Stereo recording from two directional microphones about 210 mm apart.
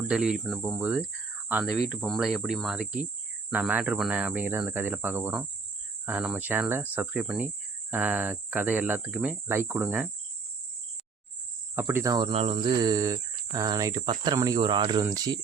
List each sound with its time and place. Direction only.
0.1 s speech: 5° right (ahead or behind)
11.7 s speech: 10° right (ahead or behind)